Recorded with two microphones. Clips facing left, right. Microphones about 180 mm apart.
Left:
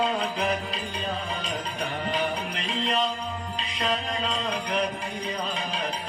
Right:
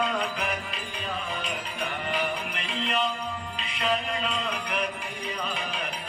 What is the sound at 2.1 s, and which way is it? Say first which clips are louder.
Music: left 2 dB; 35° left (ahead or behind).